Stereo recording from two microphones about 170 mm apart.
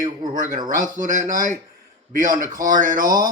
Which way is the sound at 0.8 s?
50° right (ahead or behind).